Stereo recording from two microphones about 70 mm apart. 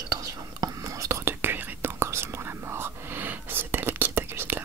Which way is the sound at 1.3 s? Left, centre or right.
Right.